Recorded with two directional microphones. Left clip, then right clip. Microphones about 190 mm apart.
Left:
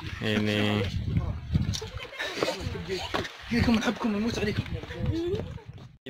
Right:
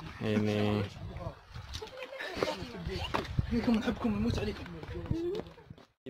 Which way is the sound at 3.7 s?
25° left (ahead or behind).